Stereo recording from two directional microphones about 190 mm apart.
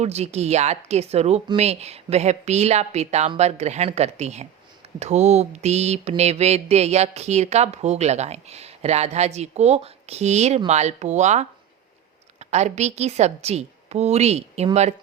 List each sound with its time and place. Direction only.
0.0 s mantra: 35° right (ahead or behind)